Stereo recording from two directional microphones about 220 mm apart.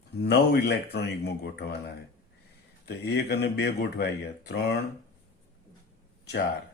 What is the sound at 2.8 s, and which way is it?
Speech, 50° left (ahead or behind).